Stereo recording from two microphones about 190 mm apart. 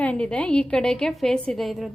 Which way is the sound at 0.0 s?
5° left (ahead or behind).